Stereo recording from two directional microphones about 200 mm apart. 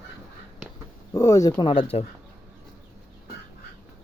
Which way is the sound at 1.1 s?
15° left (ahead or behind).